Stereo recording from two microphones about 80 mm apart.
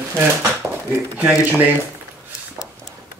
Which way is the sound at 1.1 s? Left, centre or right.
Right.